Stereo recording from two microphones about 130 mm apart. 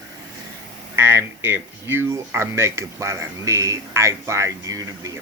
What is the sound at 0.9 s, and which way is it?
Speech, 20° right (ahead or behind).